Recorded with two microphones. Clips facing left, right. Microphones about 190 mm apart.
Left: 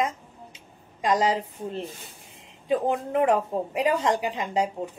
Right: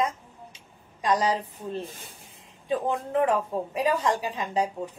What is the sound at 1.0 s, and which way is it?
A woman's voice, 20° left (ahead or behind).